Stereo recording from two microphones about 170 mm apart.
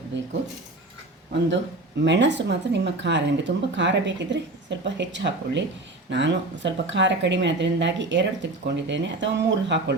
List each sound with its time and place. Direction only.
2.0 s speech: 90° right